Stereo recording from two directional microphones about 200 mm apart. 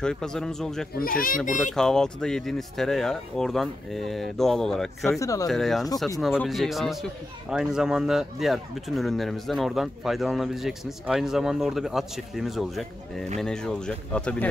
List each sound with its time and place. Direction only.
0.0 s a man's voice: 5° left (ahead or behind)
0.9 s speech: 45° left (ahead or behind)
1.6 s a man's voice: centre (ahead or behind)
5.2 s speech: 15° left (ahead or behind)
5.5 s a man's voice: centre (ahead or behind)